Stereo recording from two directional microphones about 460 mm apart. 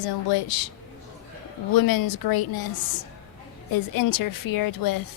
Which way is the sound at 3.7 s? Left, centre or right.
Left.